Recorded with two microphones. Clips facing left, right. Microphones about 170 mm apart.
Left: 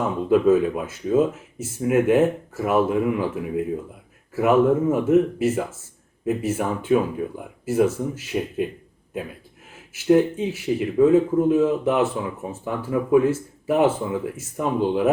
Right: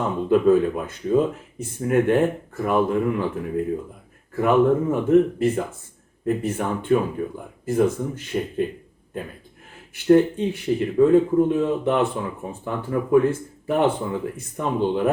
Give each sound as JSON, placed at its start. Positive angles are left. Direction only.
{"t": 0.0, "sound": "speech", "side_deg": 5}